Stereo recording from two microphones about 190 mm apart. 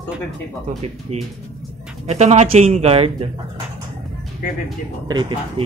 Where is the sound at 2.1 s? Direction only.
35° right (ahead or behind).